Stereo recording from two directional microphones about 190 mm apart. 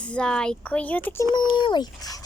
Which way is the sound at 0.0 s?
5° left (ahead or behind).